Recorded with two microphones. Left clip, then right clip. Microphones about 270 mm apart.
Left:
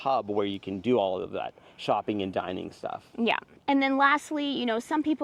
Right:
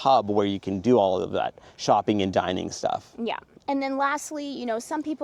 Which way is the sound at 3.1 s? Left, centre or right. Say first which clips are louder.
Left 3 dB; left.